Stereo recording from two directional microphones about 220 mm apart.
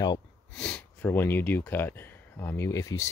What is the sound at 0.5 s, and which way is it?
Speech, 5° left (ahead or behind).